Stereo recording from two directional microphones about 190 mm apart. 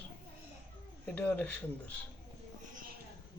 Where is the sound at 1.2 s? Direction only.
5° left (ahead or behind).